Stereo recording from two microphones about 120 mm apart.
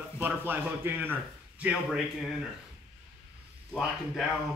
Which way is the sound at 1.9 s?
5° right (ahead or behind).